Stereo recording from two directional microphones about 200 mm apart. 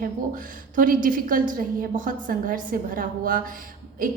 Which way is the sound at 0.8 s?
45° right (ahead or behind).